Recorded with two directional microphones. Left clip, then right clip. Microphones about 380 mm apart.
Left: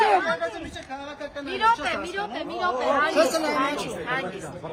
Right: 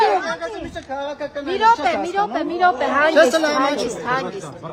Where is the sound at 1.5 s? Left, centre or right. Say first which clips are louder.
Right 7 dB; centre; by 3.1 s right.